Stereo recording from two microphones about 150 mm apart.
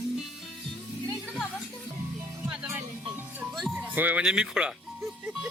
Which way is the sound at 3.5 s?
Centre (ahead or behind).